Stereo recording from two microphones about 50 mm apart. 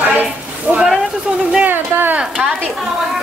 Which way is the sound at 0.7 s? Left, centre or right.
Right.